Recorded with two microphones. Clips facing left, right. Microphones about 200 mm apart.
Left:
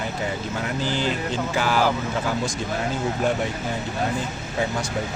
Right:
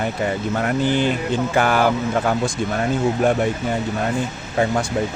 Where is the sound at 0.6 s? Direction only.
55° right (ahead or behind).